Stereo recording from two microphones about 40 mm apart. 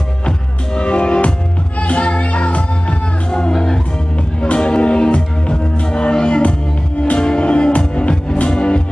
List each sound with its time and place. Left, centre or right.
0.7 s music: left
3.5 s music: centre
4.4 s music: left